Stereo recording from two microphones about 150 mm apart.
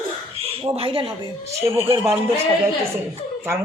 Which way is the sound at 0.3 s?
40° right (ahead or behind).